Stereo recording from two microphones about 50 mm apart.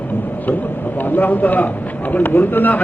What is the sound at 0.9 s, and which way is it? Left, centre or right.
A man's voice, left.